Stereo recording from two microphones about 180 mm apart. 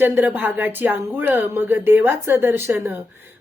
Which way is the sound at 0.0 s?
10° right (ahead or behind).